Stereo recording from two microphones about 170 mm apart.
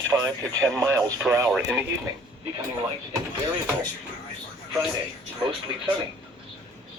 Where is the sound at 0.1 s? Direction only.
20° right (ahead or behind).